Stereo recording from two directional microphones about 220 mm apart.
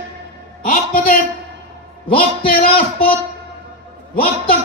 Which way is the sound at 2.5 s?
40° left (ahead or behind).